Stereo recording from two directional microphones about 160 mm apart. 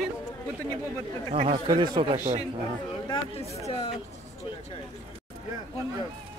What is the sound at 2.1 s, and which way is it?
Speech, 45° right (ahead or behind).